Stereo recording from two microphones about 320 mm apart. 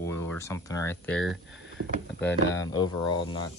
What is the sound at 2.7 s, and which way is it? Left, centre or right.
Speech, centre.